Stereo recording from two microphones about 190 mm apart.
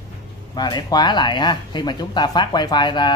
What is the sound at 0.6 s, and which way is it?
Speech, 20° left (ahead or behind).